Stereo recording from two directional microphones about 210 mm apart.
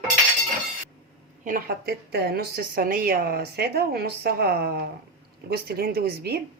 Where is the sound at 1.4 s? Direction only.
45° right (ahead or behind).